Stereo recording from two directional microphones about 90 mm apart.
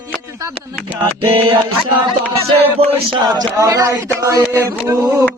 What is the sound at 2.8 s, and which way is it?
Music, 90° right.